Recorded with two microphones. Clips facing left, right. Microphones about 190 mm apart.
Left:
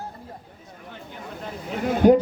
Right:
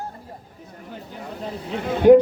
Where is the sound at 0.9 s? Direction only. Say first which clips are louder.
Right 3 dB; 35° right (ahead or behind).